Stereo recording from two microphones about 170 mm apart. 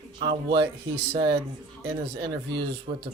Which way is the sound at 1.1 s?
25° right (ahead or behind).